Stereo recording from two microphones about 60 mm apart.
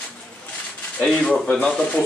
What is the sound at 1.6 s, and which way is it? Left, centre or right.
Speech, centre.